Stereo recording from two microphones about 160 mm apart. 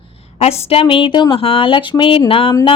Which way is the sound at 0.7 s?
35° left (ahead or behind).